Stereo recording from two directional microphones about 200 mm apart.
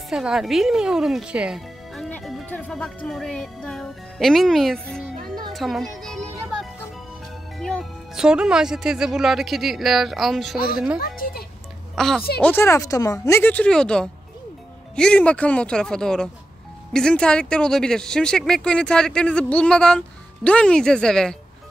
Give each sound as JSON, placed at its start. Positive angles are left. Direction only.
{"t": 0.1, "sound": "speech", "side_deg": 0}
{"t": 5.5, "sound": "music", "side_deg": 0}
{"t": 7.5, "sound": "speech", "side_deg": 0}
{"t": 11.0, "sound": "a sound", "side_deg": 45}
{"t": 11.9, "sound": "speech", "side_deg": 0}